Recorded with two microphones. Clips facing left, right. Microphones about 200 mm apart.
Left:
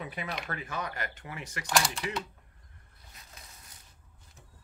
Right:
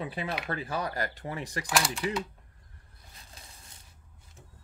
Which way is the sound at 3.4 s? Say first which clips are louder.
Right 1 dB; 30° right (ahead or behind).